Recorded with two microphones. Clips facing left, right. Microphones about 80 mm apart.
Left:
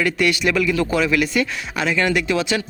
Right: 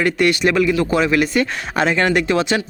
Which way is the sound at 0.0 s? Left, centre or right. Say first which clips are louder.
Right 3 dB; right.